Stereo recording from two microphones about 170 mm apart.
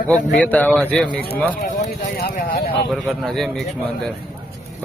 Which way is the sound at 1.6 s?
55° left (ahead or behind).